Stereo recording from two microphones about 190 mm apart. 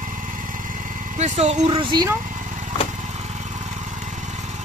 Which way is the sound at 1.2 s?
30° right (ahead or behind).